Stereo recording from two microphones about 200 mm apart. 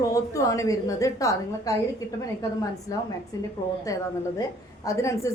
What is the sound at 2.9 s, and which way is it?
A woman's voice, 15° left (ahead or behind).